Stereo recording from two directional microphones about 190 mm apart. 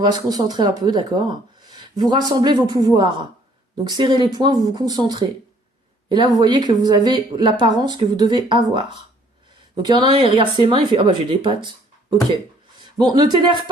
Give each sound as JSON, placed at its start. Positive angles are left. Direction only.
{"t": 0.0, "sound": "speech", "side_deg": -20}
{"t": 9.8, "sound": "speech", "side_deg": -25}
{"t": 12.8, "sound": "speech", "side_deg": -20}